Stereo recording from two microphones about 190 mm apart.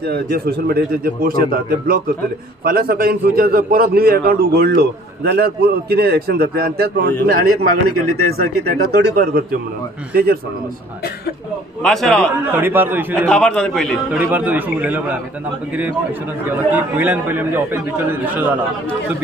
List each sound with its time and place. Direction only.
0.0 s a man's voice: 60° right (ahead or behind)
8.4 s a man's voice: 55° right (ahead or behind)
11.8 s a man's voice: centre (ahead or behind)
12.5 s a man's voice: 10° right (ahead or behind)
13.3 s a man's voice: 5° left (ahead or behind)
14.1 s a man's voice: 10° right (ahead or behind)
16.4 s a man's voice: 10° right (ahead or behind)